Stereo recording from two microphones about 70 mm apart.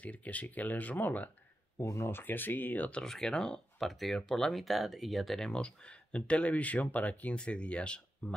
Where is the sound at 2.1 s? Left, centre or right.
Left.